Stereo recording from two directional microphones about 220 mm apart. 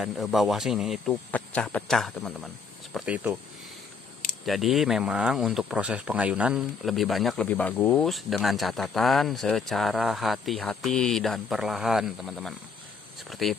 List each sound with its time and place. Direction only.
0.0 s speech: centre (ahead or behind)
4.5 s speech: centre (ahead or behind)
13.3 s speech: centre (ahead or behind)